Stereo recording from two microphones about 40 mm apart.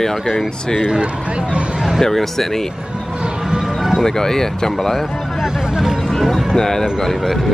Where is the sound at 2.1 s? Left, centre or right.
Centre.